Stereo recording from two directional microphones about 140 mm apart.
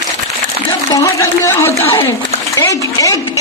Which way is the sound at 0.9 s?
20° left (ahead or behind).